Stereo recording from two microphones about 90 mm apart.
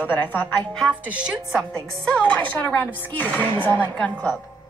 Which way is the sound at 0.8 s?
15° right (ahead or behind).